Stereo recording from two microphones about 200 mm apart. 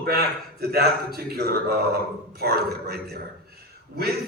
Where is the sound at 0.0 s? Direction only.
50° right (ahead or behind).